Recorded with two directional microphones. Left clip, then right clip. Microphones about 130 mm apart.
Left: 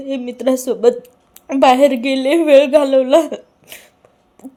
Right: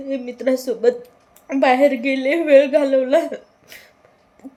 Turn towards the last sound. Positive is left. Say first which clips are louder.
# left 4 dB
turn(degrees=50)  # may be behind; listen again after turning